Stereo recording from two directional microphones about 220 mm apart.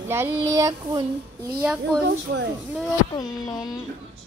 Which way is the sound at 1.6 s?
5° right (ahead or behind).